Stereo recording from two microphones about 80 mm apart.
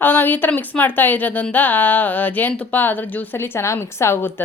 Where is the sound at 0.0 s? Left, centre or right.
Left.